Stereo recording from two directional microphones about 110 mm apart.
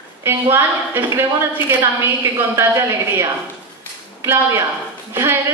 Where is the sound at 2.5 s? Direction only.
25° right (ahead or behind).